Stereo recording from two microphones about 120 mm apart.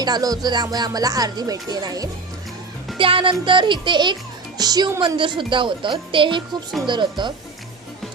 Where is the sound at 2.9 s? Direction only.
45° right (ahead or behind).